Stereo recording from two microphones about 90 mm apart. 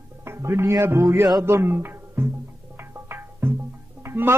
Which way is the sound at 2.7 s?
25° right (ahead or behind).